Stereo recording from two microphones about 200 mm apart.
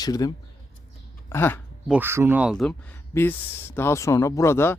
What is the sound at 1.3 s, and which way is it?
Speech, 10° left (ahead or behind).